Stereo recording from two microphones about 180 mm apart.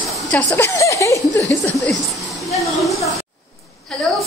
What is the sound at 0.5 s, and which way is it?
A woman's voice, 15° left (ahead or behind).